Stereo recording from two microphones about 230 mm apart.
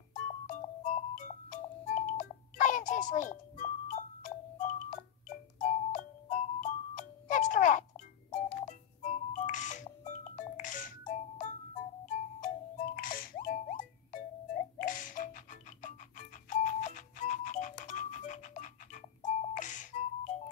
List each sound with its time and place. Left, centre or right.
0.1 s music: left
12.9 s music: left